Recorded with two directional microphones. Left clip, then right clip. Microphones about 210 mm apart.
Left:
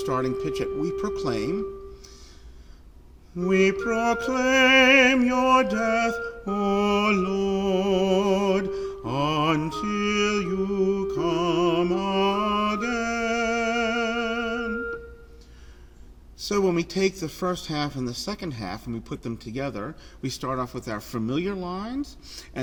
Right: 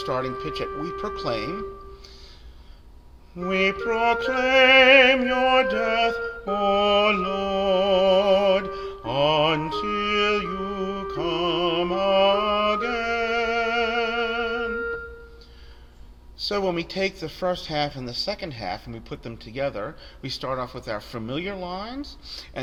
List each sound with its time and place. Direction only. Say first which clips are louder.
0.0 s speech: left 1 dB; 55° left (ahead or behind)
3.3 s speech: left 1 dB; 55° left (ahead or behind)
6.4 s music: right 4 dB; 50° left (ahead or behind)
16.4 s speech: left 1 dB; 55° left (ahead or behind)